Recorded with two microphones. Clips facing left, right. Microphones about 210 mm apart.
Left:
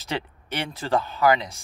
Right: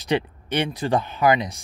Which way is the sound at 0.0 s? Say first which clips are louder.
Right 7 dB; 15° right (ahead or behind).